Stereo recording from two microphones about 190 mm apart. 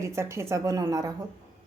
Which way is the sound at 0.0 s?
15° right (ahead or behind).